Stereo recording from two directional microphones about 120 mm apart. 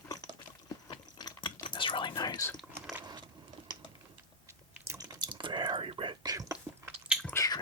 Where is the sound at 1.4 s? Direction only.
40° left (ahead or behind).